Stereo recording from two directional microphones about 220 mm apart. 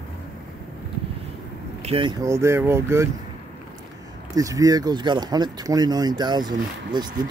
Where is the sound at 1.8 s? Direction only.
25° right (ahead or behind).